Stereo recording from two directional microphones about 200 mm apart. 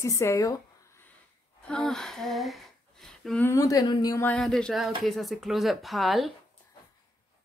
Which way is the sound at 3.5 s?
15° left (ahead or behind).